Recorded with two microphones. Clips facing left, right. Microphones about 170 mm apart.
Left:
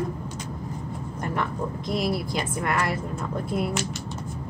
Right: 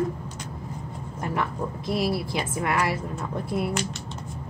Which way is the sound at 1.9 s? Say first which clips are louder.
Right 1 dB; 5° right (ahead or behind).